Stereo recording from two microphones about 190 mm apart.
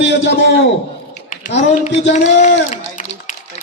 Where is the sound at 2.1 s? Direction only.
35° left (ahead or behind).